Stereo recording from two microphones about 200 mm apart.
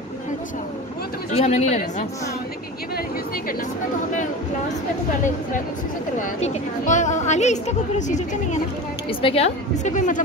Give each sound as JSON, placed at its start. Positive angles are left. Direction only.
{"t": 1.4, "sound": "a woman's voice", "side_deg": 35}
{"t": 6.4, "sound": "a woman's voice", "side_deg": 40}